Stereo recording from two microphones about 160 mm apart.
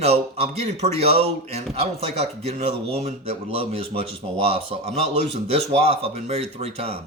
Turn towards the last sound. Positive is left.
turn(degrees=-40)  # may be behind; listen again after turning